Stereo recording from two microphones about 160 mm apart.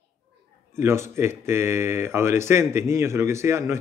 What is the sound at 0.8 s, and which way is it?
A man's voice, 15° right (ahead or behind).